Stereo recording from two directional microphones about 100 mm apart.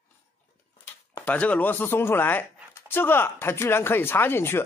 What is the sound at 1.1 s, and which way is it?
Speech, 15° left (ahead or behind).